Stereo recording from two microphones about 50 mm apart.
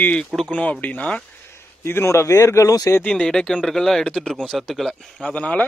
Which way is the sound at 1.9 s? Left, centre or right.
Left.